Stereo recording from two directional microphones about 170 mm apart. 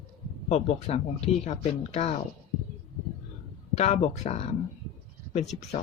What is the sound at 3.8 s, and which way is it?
Speech, 40° left (ahead or behind).